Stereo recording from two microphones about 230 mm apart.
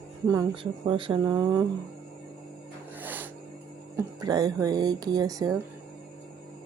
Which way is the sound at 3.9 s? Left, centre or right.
Centre.